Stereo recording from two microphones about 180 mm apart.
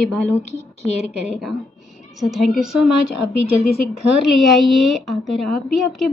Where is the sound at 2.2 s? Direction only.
Centre (ahead or behind).